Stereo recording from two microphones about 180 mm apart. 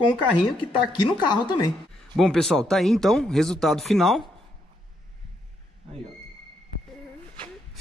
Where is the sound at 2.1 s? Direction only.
Centre (ahead or behind).